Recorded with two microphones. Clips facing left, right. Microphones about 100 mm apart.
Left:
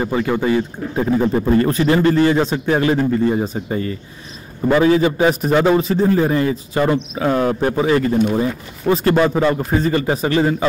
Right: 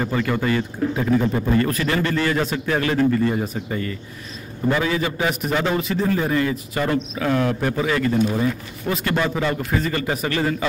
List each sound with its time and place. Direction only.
0.0 s a man's voice: 20° left (ahead or behind)
0.9 s a man's voice: 30° left (ahead or behind)